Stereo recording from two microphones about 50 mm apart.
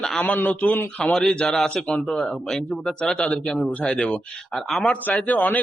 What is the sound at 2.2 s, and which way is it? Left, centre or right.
A man's voice, centre.